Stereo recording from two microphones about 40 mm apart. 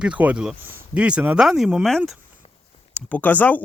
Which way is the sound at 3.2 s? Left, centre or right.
Left.